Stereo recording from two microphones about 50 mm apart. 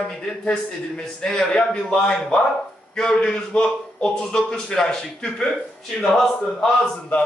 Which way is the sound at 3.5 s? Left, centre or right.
Centre.